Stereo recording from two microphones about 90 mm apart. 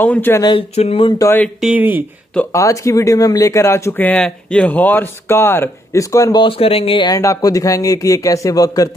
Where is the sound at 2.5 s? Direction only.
35° left (ahead or behind).